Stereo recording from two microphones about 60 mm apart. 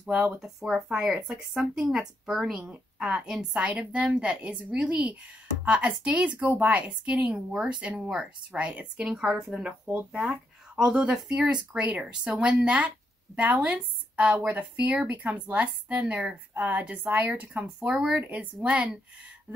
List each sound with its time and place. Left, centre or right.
0.1 s speech: centre
2.7 s speech: centre
17.7 s speech: centre
18.2 s speech: right